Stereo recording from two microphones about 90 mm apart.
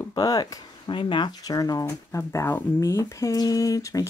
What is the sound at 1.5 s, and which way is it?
Speech, 45° left (ahead or behind).